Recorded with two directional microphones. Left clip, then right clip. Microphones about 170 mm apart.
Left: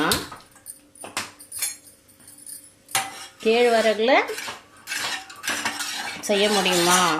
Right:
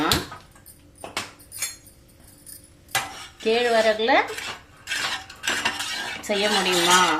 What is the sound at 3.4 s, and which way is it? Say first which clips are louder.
Speech: left 1 dB; 45° left (ahead or behind).